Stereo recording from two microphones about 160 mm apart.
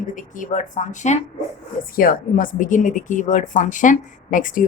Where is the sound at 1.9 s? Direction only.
65° left (ahead or behind).